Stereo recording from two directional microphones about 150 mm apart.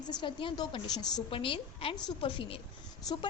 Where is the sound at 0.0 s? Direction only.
30° left (ahead or behind).